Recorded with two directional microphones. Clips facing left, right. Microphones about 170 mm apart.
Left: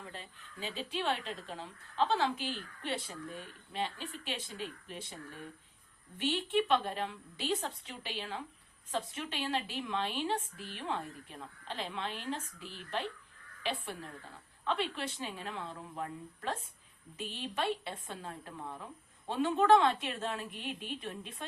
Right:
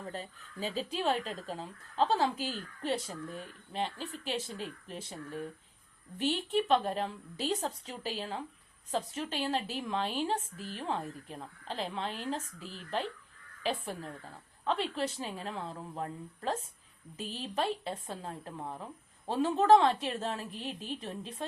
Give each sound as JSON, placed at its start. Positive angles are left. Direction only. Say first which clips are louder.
{"t": 0.0, "sound": "speech", "louder": "right 6 dB", "side_deg": -40}